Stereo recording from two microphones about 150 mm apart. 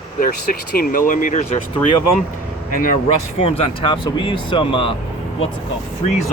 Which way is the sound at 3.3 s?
40° left (ahead or behind).